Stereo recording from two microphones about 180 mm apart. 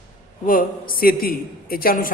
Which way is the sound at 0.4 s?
50° left (ahead or behind).